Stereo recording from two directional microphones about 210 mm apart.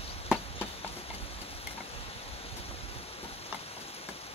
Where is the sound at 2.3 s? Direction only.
30° left (ahead or behind).